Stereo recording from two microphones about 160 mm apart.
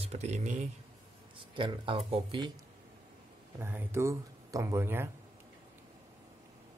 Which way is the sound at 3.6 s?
15° right (ahead or behind).